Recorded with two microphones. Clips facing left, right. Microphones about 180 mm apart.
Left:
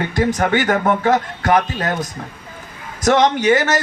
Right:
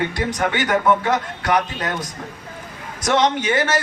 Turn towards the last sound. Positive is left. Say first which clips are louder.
# left 4 dB
turn(degrees=45)  # may be behind; listen again after turning